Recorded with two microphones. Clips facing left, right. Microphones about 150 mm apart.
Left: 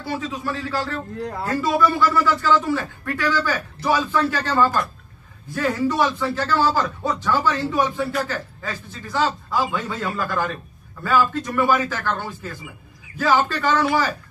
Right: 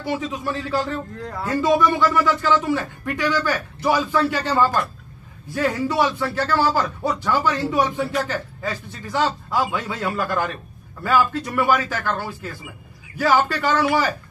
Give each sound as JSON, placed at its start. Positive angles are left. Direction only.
{"t": 0.0, "sound": "speech", "side_deg": -20}